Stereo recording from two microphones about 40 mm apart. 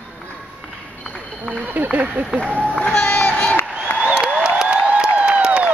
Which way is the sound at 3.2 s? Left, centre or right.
Centre.